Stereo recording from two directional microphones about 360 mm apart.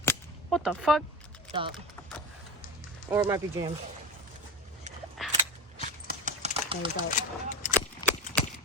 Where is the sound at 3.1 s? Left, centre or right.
Centre.